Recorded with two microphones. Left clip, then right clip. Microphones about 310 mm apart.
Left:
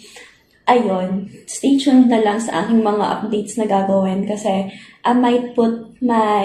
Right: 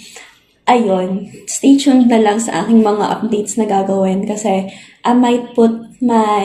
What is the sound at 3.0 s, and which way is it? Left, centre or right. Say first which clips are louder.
Speech: right 3 dB; right.